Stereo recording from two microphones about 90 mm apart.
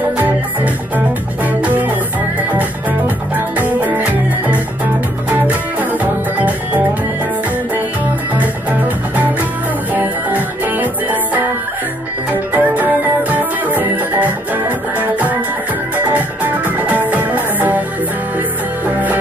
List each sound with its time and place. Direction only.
0.9 s music: 20° right (ahead or behind)
3.5 s music: 20° right (ahead or behind)
8.4 s music: 15° right (ahead or behind)